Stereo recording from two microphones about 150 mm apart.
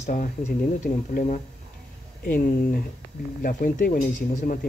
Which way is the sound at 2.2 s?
70° left (ahead or behind).